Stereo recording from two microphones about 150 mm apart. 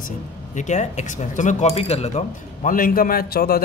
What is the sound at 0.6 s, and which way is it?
Speech, 50° left (ahead or behind).